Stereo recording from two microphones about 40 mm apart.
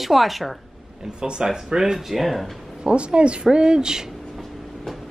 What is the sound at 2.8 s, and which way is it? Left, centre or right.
A woman's voice, right.